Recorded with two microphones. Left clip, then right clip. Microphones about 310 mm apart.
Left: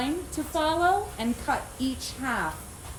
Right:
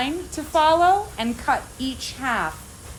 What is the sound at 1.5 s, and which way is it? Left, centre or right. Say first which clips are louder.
Speech: right 6 dB; centre.